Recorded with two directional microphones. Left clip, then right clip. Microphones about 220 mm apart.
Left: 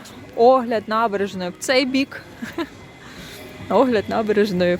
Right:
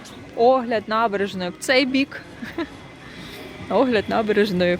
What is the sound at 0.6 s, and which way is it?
Speech, 10° left (ahead or behind).